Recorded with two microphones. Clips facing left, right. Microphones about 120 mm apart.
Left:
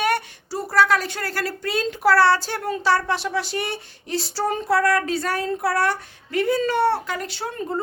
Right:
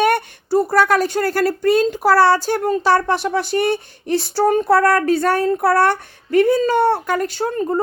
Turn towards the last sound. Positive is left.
turn(degrees=-45)  # may be behind; listen again after turning